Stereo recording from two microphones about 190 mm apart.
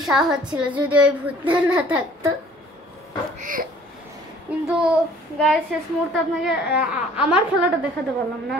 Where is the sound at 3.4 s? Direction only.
45° right (ahead or behind).